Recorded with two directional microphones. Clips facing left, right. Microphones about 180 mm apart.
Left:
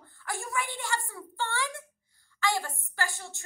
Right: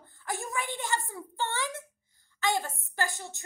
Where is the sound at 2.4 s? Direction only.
20° right (ahead or behind).